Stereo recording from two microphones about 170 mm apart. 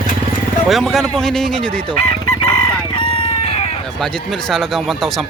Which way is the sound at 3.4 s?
35° left (ahead or behind).